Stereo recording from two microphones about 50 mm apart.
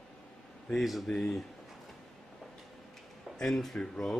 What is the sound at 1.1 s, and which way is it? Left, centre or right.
Speech, centre.